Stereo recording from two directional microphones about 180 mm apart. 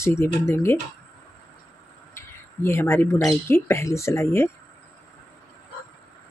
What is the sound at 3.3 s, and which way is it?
Speech, 15° left (ahead or behind).